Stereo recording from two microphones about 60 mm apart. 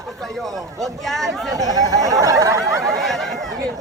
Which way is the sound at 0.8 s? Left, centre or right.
Centre.